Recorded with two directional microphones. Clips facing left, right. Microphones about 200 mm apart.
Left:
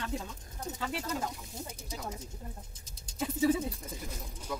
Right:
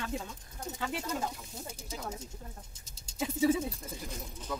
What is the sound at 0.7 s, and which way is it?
Speech, 10° right (ahead or behind).